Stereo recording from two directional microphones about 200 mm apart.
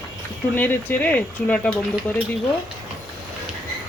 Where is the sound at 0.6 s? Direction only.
10° left (ahead or behind).